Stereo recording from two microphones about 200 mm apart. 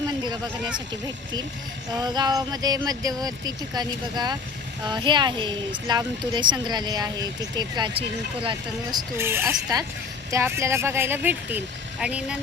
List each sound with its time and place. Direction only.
2.0 s speech: 20° right (ahead or behind); by 12.4 s 5° right (ahead or behind)